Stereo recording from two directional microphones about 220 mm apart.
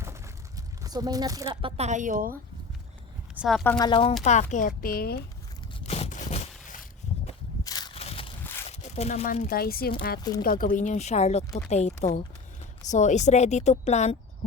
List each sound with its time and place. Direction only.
0.8 s speech: 15° right (ahead or behind)
1.7 s a woman's voice: 30° right (ahead or behind)
3.3 s speech: centre (ahead or behind)
3.6 s speech: 15° left (ahead or behind)
4.2 s a woman's voice: 30° left (ahead or behind)
5.8 s a sound: 30° left (ahead or behind)
7.6 s a sound: 15° left (ahead or behind)
8.7 s a woman's voice: 30° left (ahead or behind)